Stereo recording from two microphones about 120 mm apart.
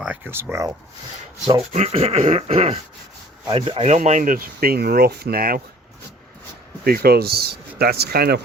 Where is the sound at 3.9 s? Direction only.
75° right (ahead or behind).